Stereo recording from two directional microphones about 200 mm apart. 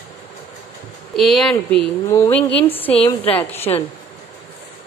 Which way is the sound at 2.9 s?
30° left (ahead or behind).